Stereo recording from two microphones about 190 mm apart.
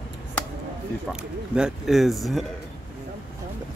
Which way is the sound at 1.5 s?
Centre (ahead or behind).